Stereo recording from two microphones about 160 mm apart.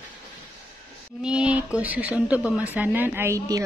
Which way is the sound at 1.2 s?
5° right (ahead or behind).